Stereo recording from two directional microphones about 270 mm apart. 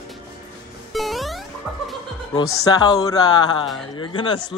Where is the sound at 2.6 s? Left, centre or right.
Centre.